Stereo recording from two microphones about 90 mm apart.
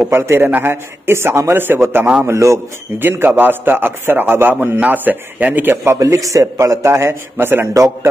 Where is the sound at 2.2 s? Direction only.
35° right (ahead or behind).